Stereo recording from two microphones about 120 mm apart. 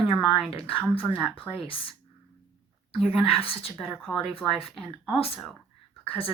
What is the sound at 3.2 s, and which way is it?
Speech, 50° left (ahead or behind).